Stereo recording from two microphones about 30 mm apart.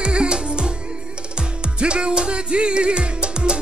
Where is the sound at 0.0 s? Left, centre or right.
Right.